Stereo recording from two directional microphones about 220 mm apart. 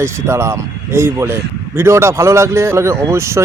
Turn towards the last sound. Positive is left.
turn(degrees=-10)  # may be behind; listen again after turning